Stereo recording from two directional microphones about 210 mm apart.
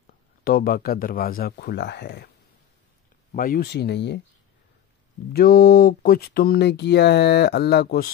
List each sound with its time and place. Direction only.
0.4 s speech: 45° left (ahead or behind)
3.3 s speech: 40° left (ahead or behind)
5.3 s speech: 45° left (ahead or behind)